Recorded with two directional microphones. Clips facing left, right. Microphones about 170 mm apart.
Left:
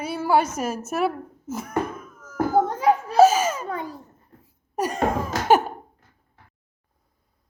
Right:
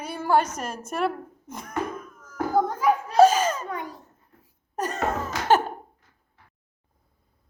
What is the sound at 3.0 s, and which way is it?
Laughter, 5° left (ahead or behind).